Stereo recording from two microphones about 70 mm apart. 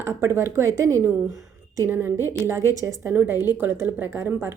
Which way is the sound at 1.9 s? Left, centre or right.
Right.